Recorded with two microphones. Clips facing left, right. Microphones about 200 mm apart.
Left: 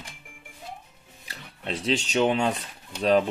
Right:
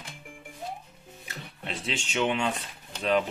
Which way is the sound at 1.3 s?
35° left (ahead or behind).